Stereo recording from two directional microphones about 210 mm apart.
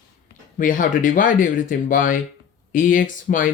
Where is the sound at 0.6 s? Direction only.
40° left (ahead or behind).